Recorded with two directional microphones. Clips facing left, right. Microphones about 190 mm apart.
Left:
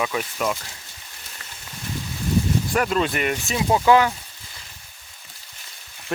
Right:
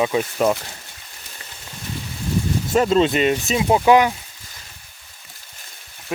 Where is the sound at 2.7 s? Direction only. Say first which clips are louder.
Right 8 dB; 25° right (ahead or behind).